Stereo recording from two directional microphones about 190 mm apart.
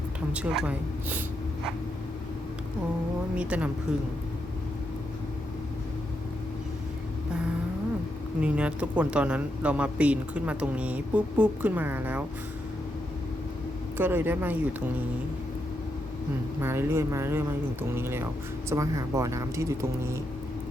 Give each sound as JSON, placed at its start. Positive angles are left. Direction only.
{"t": 0.3, "sound": "speech", "side_deg": -5}
{"t": 3.3, "sound": "speech", "side_deg": -5}
{"t": 8.4, "sound": "speech", "side_deg": -5}
{"t": 14.0, "sound": "speech", "side_deg": -10}
{"t": 16.6, "sound": "speech", "side_deg": -15}